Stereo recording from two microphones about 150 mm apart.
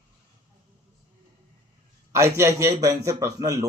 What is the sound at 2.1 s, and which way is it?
A man's voice, 20° right (ahead or behind).